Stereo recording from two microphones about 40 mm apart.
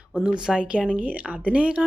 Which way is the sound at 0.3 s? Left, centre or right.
Right.